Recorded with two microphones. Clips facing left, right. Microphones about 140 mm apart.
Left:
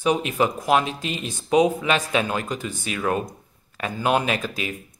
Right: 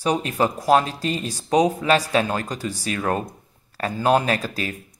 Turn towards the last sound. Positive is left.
turn(degrees=-40)  # may be behind; listen again after turning